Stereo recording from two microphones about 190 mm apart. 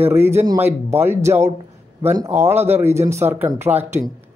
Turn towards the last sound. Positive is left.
turn(degrees=-10)  # may be behind; listen again after turning